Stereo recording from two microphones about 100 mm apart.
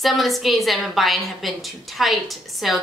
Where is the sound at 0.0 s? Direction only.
Centre (ahead or behind).